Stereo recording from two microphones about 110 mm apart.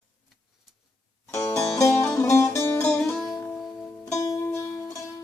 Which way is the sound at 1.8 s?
30° left (ahead or behind).